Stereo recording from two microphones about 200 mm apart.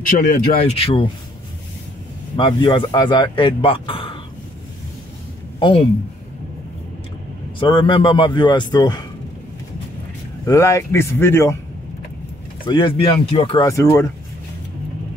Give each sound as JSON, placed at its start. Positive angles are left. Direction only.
{"t": 0.1, "sound": "speech", "side_deg": 40}
{"t": 0.7, "sound": "speech", "side_deg": 30}
{"t": 2.3, "sound": "speech", "side_deg": 25}
{"t": 5.6, "sound": "speech", "side_deg": 25}
{"t": 7.5, "sound": "speech", "side_deg": 25}
{"t": 10.4, "sound": "speech", "side_deg": 15}
{"t": 12.6, "sound": "speech", "side_deg": 25}
{"t": 13.7, "sound": "speech", "side_deg": 15}